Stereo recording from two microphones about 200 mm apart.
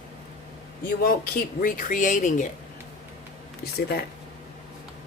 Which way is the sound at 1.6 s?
40° left (ahead or behind).